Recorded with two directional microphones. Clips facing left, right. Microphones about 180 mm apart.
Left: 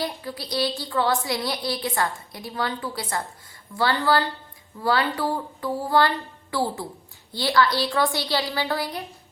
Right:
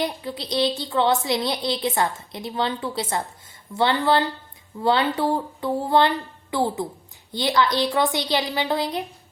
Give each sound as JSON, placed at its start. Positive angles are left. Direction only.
{"t": 0.0, "sound": "a woman's voice", "side_deg": -20}